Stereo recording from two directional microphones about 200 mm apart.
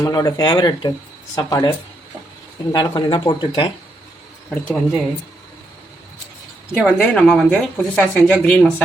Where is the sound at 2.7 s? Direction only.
20° left (ahead or behind).